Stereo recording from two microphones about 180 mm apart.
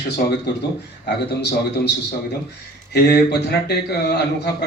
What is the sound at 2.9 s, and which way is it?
Speech, 65° left (ahead or behind).